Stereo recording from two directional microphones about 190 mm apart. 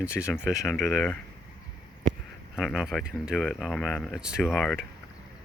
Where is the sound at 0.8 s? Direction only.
Centre (ahead or behind).